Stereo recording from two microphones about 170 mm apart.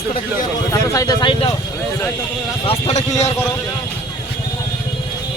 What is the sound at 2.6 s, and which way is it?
Speech, 35° left (ahead or behind).